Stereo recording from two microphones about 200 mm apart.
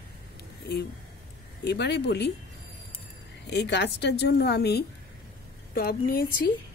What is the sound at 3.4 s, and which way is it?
A woman's voice, 60° left (ahead or behind).